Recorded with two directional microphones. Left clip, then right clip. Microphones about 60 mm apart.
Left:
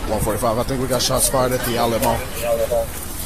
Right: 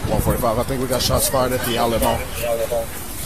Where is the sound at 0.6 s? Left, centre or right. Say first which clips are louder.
Left 1 dB; left.